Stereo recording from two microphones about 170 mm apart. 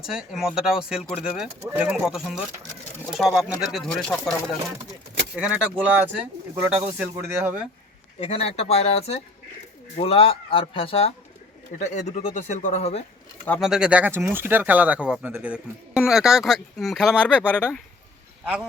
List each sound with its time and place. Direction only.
0.0 s speech: 5° right (ahead or behind)
5.3 s speech: 10° right (ahead or behind)
8.2 s speech: 35° left (ahead or behind)
11.8 s speech: 45° left (ahead or behind)
13.6 s speech: 5° right (ahead or behind)